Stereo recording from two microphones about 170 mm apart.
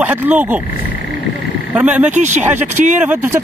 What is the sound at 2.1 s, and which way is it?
Speech, 45° right (ahead or behind).